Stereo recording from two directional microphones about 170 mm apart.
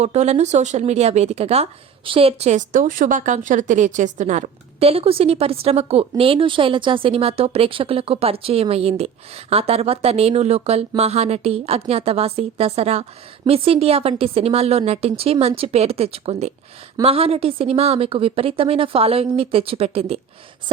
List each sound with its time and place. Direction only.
0.0 s a woman's voice: 40° right (ahead or behind)